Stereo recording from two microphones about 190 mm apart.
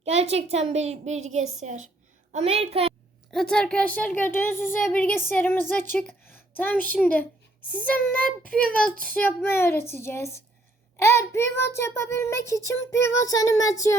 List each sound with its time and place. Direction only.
0.0 s a woman's voice: 35° right (ahead or behind)
3.3 s child singing: 5° left (ahead or behind)